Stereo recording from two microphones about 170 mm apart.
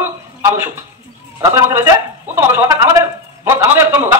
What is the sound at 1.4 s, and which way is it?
A man's voice, 15° right (ahead or behind).